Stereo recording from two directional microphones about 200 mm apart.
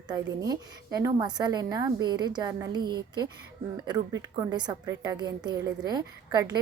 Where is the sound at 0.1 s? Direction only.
20° right (ahead or behind).